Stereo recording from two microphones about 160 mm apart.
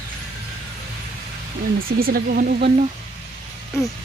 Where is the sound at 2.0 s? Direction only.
70° right (ahead or behind).